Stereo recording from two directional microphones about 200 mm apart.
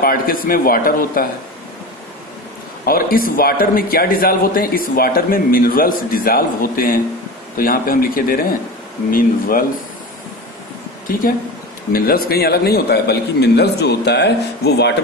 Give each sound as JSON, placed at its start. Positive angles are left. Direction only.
{"t": 0.0, "sound": "speech", "side_deg": 45}
{"t": 2.8, "sound": "speech", "side_deg": 45}
{"t": 11.1, "sound": "a man's voice", "side_deg": 45}